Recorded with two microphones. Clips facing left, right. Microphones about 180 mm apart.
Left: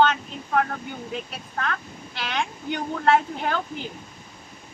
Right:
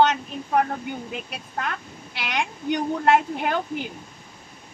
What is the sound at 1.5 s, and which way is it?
A woman's voice, 10° right (ahead or behind).